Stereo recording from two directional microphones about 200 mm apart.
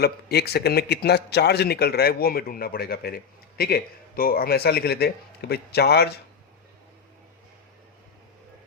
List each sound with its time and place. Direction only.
0.0 s a man's voice: 55° left (ahead or behind)